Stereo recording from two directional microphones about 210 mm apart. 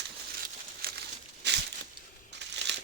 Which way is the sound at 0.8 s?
45° right (ahead or behind).